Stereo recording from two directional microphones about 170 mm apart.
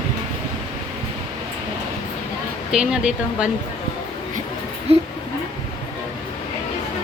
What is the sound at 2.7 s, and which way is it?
Speech, 5° right (ahead or behind).